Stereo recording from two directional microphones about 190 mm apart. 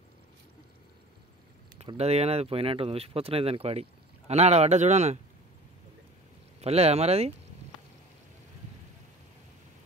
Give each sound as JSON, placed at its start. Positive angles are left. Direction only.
{"t": 1.8, "sound": "speech", "side_deg": -35}
{"t": 6.6, "sound": "speech", "side_deg": -35}